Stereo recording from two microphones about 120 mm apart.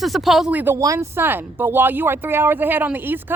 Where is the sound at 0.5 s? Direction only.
15° right (ahead or behind).